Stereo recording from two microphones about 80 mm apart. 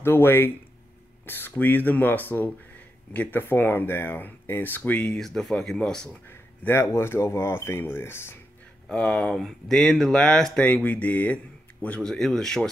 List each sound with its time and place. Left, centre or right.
0.0 s speech: left
5.0 s speech: centre
6.2 s speech: left
8.8 s speech: centre
10.7 s speech: centre
12.0 s speech: centre